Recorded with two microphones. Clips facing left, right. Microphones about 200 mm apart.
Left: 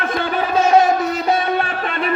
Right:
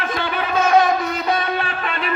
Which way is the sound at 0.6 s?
40° left (ahead or behind).